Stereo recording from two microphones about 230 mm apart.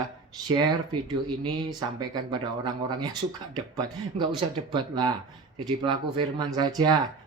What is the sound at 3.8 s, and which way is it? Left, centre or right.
Speech, centre.